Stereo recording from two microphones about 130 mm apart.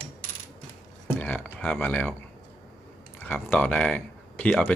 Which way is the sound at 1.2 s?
10° left (ahead or behind).